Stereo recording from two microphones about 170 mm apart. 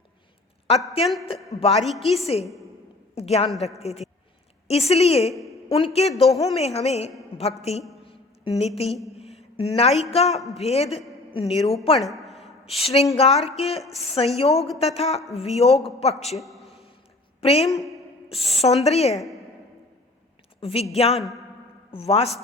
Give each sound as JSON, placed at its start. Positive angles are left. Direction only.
{"t": 1.5, "sound": "speech", "side_deg": 35}
{"t": 1.8, "sound": "a woman's voice", "side_deg": 0}
{"t": 2.1, "sound": "speech", "side_deg": 35}
{"t": 8.0, "sound": "a sound", "side_deg": 35}
{"t": 9.6, "sound": "speech", "side_deg": 35}
{"t": 11.9, "sound": "a sound", "side_deg": 0}
{"t": 12.7, "sound": "speech", "side_deg": 35}
{"t": 14.5, "sound": "a woman's voice", "side_deg": 0}
{"t": 14.8, "sound": "speech", "side_deg": 35}
{"t": 16.4, "sound": "a sound", "side_deg": 0}
{"t": 17.4, "sound": "a woman's voice", "side_deg": 35}
{"t": 20.6, "sound": "a woman's voice", "side_deg": 35}